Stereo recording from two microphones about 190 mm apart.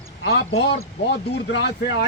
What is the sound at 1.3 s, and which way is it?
Speech, 65° left (ahead or behind).